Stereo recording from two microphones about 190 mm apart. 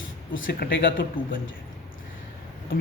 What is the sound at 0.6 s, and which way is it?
Speech, 55° left (ahead or behind).